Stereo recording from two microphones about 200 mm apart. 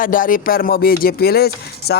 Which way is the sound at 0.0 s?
45° left (ahead or behind).